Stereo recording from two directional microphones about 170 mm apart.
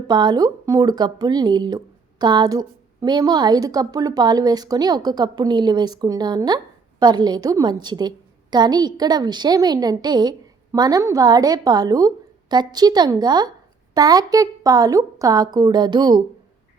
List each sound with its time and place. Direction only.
0.1 s a woman's voice: 25° right (ahead or behind)